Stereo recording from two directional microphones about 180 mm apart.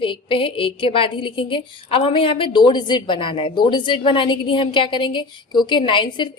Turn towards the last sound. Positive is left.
turn(degrees=25)  # may be behind; listen again after turning